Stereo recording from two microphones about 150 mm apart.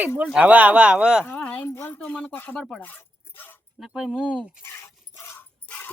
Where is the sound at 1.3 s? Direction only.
10° left (ahead or behind).